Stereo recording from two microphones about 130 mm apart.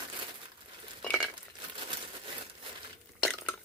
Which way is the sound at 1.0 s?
5° left (ahead or behind).